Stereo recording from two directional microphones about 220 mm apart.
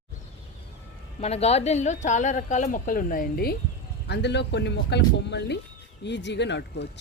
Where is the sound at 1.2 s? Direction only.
30° left (ahead or behind).